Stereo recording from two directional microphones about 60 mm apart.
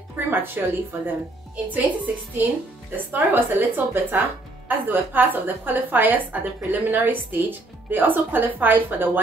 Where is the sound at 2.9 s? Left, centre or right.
Right.